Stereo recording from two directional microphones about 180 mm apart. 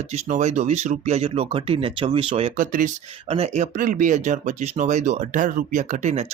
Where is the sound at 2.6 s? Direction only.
50° right (ahead or behind).